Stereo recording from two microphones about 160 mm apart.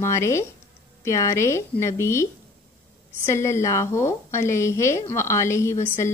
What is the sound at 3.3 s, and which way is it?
A woman's voice, 15° left (ahead or behind).